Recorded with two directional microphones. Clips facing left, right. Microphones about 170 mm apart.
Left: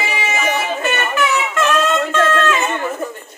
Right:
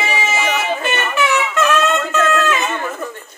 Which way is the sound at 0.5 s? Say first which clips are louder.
Even; 20° left (ahead or behind).